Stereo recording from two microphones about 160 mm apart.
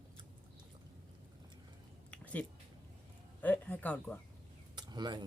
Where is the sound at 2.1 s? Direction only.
10° left (ahead or behind).